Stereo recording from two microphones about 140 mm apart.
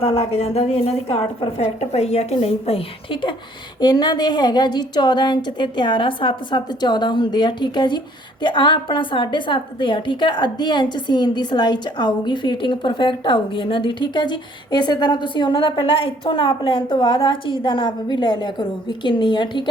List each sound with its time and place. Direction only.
0.0 s a woman's voice: 45° left (ahead or behind)